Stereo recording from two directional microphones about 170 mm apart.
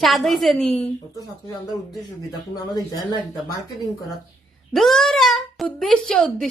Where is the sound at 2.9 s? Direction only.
20° left (ahead or behind).